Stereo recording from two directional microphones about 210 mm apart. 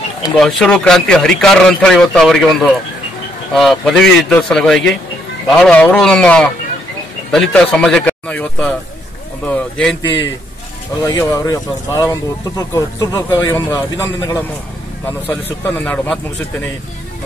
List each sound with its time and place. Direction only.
0.4 s speech: centre (ahead or behind)